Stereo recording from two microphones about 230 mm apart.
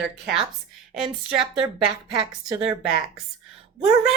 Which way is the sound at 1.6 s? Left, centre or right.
Centre.